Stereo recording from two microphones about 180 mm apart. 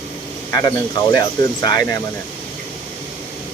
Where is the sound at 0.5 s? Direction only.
20° left (ahead or behind).